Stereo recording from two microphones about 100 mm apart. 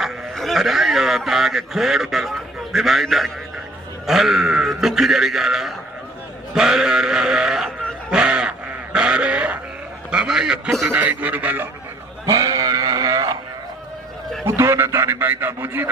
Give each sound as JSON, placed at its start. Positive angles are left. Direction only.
{"t": 0.0, "sound": "a man's voice", "side_deg": 0}
{"t": 8.1, "sound": "a sound", "side_deg": -10}
{"t": 10.1, "sound": "a man's voice", "side_deg": -5}
{"t": 10.9, "sound": "a man's voice", "side_deg": -15}
{"t": 12.2, "sound": "music", "side_deg": -35}
{"t": 14.4, "sound": "a man's voice", "side_deg": -25}